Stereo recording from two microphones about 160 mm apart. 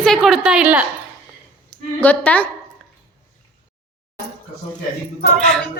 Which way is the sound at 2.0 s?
10° left (ahead or behind).